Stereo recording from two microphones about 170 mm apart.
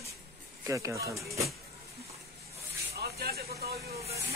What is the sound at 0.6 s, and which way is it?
Speech, 20° right (ahead or behind).